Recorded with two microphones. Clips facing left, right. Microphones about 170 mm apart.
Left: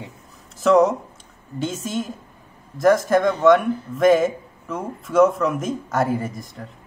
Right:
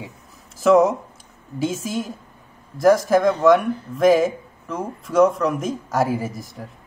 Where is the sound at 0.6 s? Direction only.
Centre (ahead or behind).